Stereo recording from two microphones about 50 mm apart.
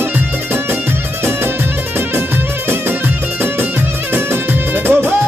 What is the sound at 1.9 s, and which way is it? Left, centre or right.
Music, right.